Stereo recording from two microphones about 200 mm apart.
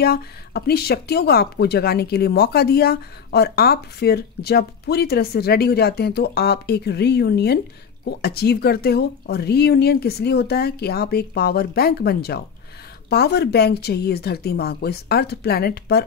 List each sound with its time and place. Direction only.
0.0 s speech: 50° left (ahead or behind)